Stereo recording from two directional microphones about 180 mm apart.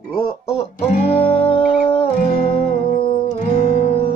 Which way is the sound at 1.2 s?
30° left (ahead or behind).